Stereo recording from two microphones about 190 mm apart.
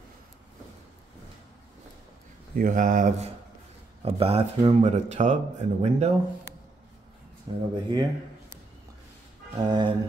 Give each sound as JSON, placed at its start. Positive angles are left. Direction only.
{"t": 2.5, "sound": "speech", "side_deg": -45}
{"t": 4.0, "sound": "speech", "side_deg": -30}
{"t": 7.7, "sound": "speech", "side_deg": -20}
{"t": 9.6, "sound": "speech", "side_deg": -20}